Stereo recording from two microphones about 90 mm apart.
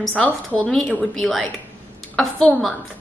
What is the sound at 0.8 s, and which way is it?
A woman's voice, centre (ahead or behind).